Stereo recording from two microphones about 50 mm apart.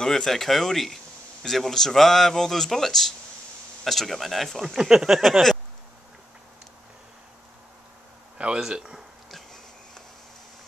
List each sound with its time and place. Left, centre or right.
0.0 s speech: centre
8.4 s speech: centre
9.3 s a sound: centre